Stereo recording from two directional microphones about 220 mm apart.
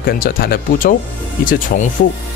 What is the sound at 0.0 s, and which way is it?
Speech, 40° left (ahead or behind).